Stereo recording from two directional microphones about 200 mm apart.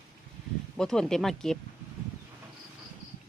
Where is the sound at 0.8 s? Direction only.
5° left (ahead or behind).